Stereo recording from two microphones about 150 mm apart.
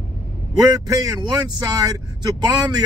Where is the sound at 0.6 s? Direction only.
25° right (ahead or behind).